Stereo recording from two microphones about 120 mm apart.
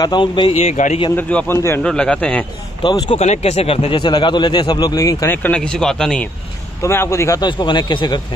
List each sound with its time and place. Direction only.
0.0 s speech: 40° left (ahead or behind)
0.7 s a man's voice: 90° left
1.1 s a man's voice: 20° left (ahead or behind)
1.8 s speech: 5° left (ahead or behind)
2.8 s speech: 40° left (ahead or behind)
3.2 s speech: 65° left (ahead or behind)
4.0 s speech: 40° left (ahead or behind)
5.3 s speech: 10° left (ahead or behind)
6.8 s a man's voice: 20° left (ahead or behind)
7.4 s speech: 40° left (ahead or behind)